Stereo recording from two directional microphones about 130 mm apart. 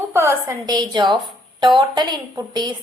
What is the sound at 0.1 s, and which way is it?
A woman's voice, 20° right (ahead or behind).